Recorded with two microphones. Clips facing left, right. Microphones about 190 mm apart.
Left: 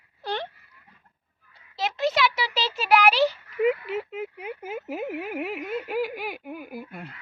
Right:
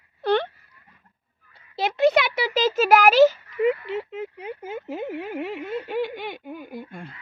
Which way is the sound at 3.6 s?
5° left (ahead or behind).